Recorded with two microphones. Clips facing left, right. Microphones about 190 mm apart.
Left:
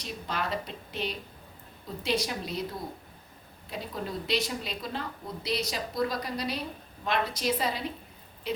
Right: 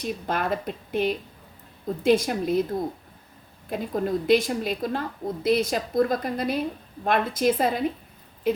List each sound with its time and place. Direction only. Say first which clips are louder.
0.0 s a woman's voice: right 7 dB; 50° right (ahead or behind)
3.7 s a woman's voice: right 10 dB; 50° right (ahead or behind)